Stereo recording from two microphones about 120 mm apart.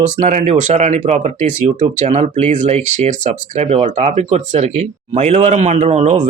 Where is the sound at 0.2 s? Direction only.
90° right.